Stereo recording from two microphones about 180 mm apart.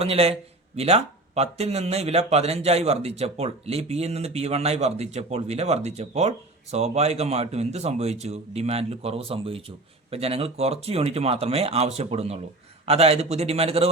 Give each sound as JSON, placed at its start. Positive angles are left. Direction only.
{"t": 0.0, "sound": "a man's voice", "side_deg": -35}